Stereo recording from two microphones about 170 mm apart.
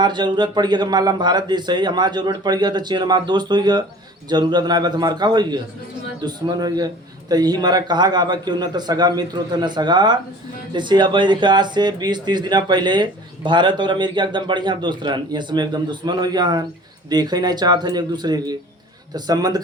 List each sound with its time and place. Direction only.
0.0 s speech: 25° right (ahead or behind)